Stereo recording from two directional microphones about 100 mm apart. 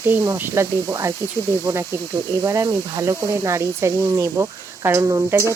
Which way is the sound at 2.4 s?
30° right (ahead or behind).